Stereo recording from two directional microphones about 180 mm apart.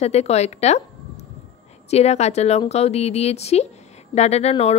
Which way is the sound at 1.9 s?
35° left (ahead or behind).